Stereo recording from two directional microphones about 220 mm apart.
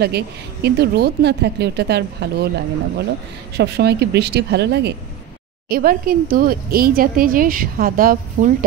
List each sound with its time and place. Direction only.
0.0 s a woman's voice: 45° right (ahead or behind)
3.5 s a woman's voice: 50° right (ahead or behind)